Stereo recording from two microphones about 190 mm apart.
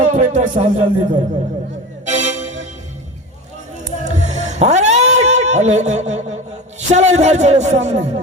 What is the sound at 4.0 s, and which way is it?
Music, 35° right (ahead or behind).